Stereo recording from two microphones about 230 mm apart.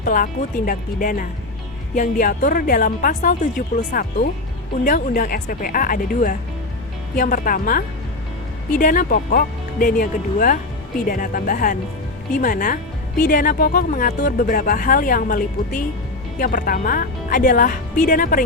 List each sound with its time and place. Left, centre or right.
0.0 s speech: left
4.9 s speech: left